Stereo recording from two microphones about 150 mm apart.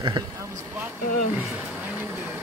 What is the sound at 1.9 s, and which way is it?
Vehicle, 15° right (ahead or behind).